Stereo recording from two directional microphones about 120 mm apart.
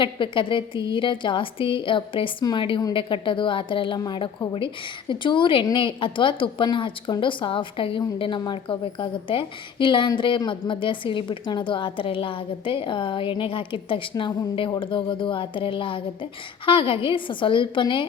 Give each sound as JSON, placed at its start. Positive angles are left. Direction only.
{"t": 0.0, "sound": "speech", "side_deg": 45}